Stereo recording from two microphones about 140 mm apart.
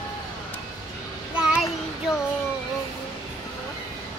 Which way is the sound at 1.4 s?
5° right (ahead or behind).